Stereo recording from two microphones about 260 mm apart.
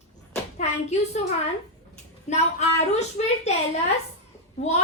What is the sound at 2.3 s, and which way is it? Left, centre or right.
Speech, left.